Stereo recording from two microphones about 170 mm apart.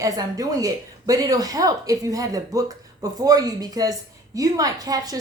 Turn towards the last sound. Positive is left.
turn(degrees=-20)  # may be behind; listen again after turning